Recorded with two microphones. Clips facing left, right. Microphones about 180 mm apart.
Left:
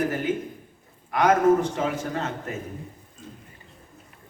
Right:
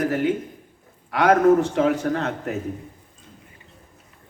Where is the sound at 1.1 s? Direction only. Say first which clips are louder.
Right 3 dB; 70° right (ahead or behind).